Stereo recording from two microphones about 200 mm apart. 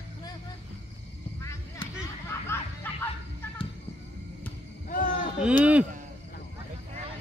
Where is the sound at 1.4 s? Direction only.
15° left (ahead or behind).